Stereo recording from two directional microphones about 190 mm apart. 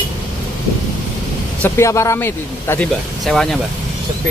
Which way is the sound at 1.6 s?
15° left (ahead or behind).